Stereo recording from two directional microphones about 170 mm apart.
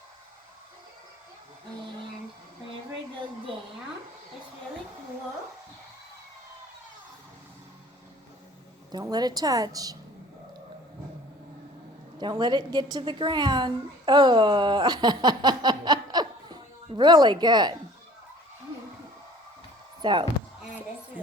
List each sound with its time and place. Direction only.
8.9 s a woman's voice: 25° right (ahead or behind)
12.2 s a woman's voice: 25° right (ahead or behind)
20.0 s speech: 25° right (ahead or behind)